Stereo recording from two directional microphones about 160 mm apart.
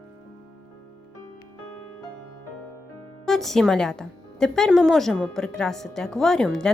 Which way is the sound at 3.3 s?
Centre (ahead or behind).